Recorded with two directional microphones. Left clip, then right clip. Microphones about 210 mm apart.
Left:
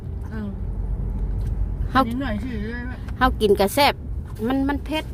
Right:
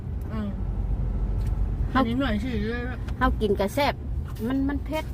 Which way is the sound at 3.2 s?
25° left (ahead or behind).